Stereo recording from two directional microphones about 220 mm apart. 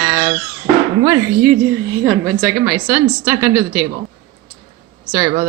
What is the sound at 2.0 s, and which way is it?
A woman's voice, 5° left (ahead or behind).